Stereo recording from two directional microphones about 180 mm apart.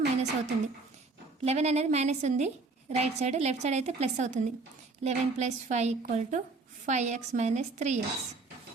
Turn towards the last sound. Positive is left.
turn(degrees=-40)  # may be behind; listen again after turning